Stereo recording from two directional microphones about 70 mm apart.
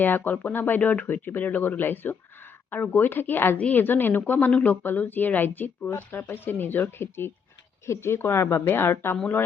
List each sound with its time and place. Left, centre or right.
0.0 s speech: left